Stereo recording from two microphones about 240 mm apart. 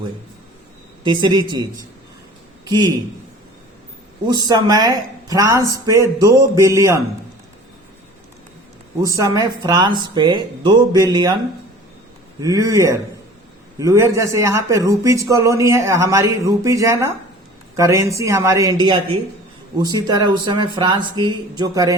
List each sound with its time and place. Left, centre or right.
1.0 s a man's voice: centre
4.3 s speech: centre
9.0 s speech: centre
12.4 s speech: centre